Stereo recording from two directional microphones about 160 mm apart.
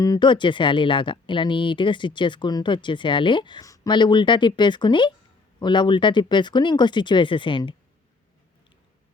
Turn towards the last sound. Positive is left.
turn(degrees=30)  # may be behind; listen again after turning